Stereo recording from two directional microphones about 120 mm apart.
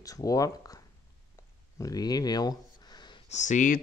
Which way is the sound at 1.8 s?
30° left (ahead or behind).